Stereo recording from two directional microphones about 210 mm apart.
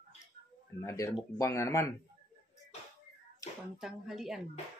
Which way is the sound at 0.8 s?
15° left (ahead or behind).